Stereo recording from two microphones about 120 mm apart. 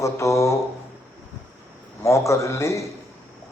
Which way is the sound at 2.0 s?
25° left (ahead or behind).